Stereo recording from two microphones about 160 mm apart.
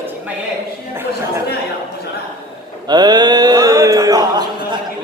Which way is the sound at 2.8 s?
25° right (ahead or behind).